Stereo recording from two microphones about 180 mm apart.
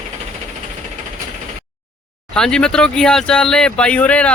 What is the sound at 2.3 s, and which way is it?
Speech, 5° left (ahead or behind).